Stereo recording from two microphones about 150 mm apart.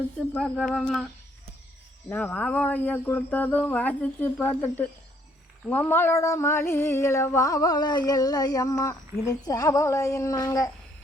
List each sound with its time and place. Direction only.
0.3 s speech: 5° left (ahead or behind)
2.0 s speech: 10° left (ahead or behind)
5.6 s a sound: 10° left (ahead or behind)